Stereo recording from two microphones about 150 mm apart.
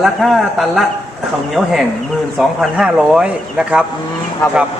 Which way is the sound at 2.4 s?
5° right (ahead or behind).